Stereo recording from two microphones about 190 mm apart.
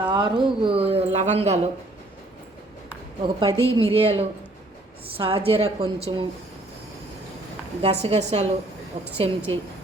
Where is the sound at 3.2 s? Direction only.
25° right (ahead or behind).